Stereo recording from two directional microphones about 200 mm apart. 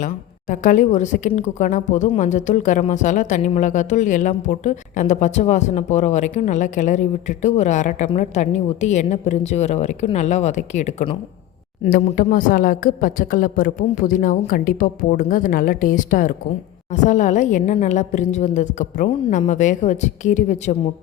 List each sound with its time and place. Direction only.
0.0 s speech: 40° left (ahead or behind)
11.9 s a woman's voice: 45° left (ahead or behind)